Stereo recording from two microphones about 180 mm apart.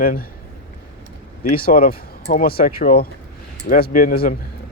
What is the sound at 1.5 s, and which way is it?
Speech, 55° left (ahead or behind).